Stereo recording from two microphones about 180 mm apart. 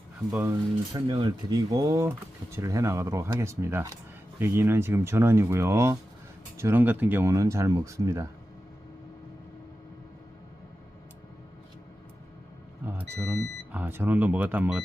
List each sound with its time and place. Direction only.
0.3 s speech: 15° right (ahead or behind)
12.8 s speech: 10° right (ahead or behind)